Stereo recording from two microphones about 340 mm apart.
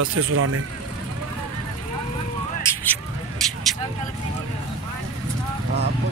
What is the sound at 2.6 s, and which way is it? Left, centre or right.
Vehicle, centre.